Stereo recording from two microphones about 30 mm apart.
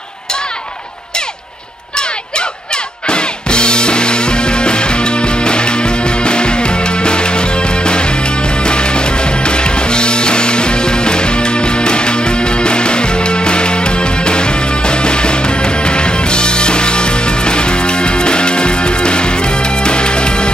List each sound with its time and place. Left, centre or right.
2.0 s music: left